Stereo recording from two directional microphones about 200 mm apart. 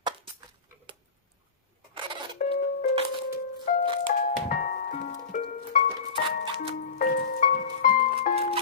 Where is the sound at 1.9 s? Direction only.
25° right (ahead or behind).